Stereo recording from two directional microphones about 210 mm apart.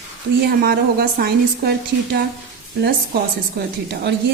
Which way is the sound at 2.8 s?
50° right (ahead or behind).